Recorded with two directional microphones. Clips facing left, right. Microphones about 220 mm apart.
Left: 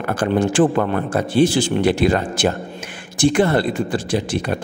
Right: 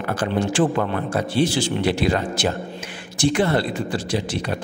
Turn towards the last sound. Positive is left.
turn(degrees=50)  # may be behind; listen again after turning